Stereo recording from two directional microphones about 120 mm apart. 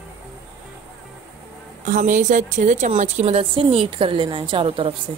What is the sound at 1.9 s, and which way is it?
A woman's voice, 90° right.